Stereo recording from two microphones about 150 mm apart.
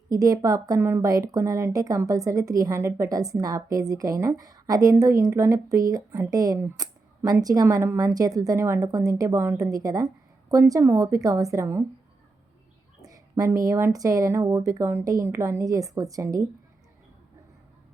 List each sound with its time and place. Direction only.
0.1 s speech: 25° right (ahead or behind)
13.0 s speech: 25° right (ahead or behind)